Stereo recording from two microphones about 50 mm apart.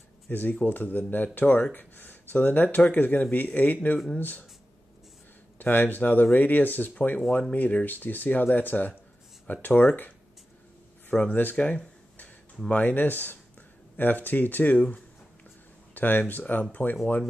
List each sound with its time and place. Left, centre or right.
0.3 s speech: left
5.6 s speech: left
11.1 s speech: centre
11.5 s a sound: left
12.7 s speech: left
15.9 s speech: left